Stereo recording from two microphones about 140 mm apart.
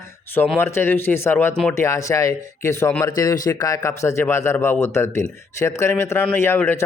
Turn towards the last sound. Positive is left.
turn(degrees=15)  # may be behind; listen again after turning